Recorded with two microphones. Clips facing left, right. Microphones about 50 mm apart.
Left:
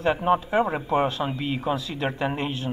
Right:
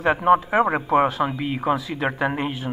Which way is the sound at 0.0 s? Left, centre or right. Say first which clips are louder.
Right 3 dB; right.